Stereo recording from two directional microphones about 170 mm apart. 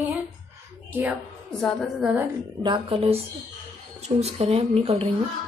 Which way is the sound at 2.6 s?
30° right (ahead or behind).